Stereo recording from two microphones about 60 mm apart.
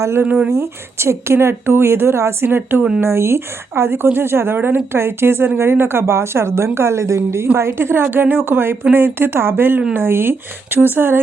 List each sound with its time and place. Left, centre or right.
0.5 s speech: right
7.4 s a woman's voice: right